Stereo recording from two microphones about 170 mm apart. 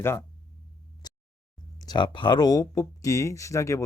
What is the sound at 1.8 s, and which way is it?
Speech, 25° left (ahead or behind).